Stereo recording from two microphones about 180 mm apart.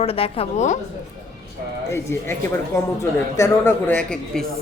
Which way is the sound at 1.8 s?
15° left (ahead or behind).